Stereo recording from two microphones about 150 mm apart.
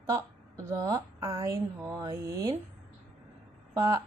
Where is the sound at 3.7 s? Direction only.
25° right (ahead or behind).